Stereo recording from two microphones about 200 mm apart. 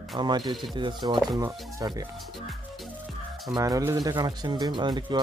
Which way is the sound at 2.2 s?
Centre (ahead or behind).